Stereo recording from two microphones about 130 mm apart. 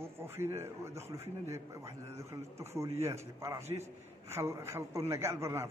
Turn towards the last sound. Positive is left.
turn(degrees=-20)  # may be behind; listen again after turning